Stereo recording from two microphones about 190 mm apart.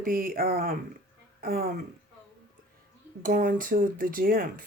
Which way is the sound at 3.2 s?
45° right (ahead or behind).